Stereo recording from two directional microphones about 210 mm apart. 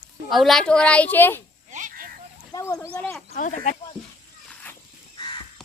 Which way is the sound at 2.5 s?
15° left (ahead or behind).